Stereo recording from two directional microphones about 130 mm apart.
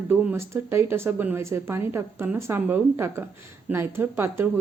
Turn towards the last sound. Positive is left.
turn(degrees=-15)  # may be behind; listen again after turning